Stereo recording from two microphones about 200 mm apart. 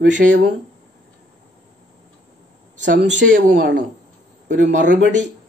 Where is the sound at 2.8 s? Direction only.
60° right (ahead or behind).